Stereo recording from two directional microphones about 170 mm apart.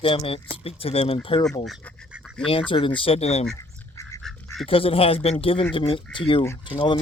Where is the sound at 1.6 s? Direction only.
Centre (ahead or behind).